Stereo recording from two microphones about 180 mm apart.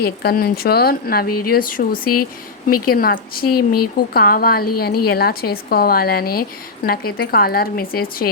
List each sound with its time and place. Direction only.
0.0 s a woman's voice: 60° left (ahead or behind)